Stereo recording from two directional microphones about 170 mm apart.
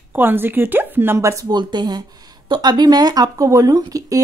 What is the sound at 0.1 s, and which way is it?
Speech, 10° right (ahead or behind).